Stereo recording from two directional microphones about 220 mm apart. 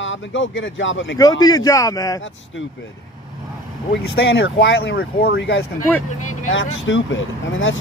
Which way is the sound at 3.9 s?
50° left (ahead or behind).